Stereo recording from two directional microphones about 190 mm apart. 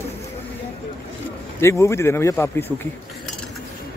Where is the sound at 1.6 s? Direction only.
15° left (ahead or behind).